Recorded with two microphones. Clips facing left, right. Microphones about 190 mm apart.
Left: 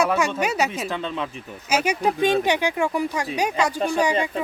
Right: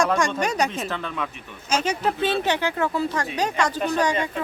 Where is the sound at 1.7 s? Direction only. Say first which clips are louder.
Left 2 dB; 10° left (ahead or behind).